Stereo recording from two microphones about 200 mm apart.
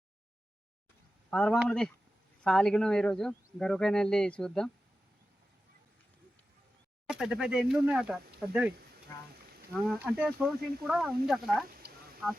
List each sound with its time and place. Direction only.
1.3 s speech: 5° left (ahead or behind)
7.1 s speech: 5° right (ahead or behind)
9.7 s speech: centre (ahead or behind)
11.7 s a sound: 50° right (ahead or behind)